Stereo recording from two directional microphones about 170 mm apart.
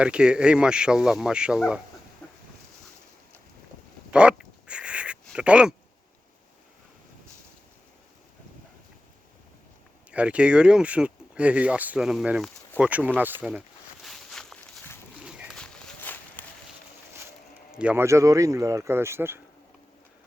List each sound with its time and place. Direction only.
0.0 s speech: 5° right (ahead or behind)
2.2 s chicken: 10° left (ahead or behind)
4.1 s a sound: 5° right (ahead or behind)
10.1 s speech: 5° right (ahead or behind)
14.0 s a sound: centre (ahead or behind)
17.7 s speech: 5° right (ahead or behind)